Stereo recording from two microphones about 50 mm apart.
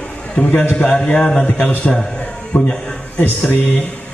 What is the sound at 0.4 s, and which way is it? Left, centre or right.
A man's voice, centre.